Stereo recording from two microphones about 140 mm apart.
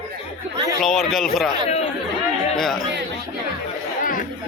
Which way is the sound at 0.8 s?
Centre (ahead or behind).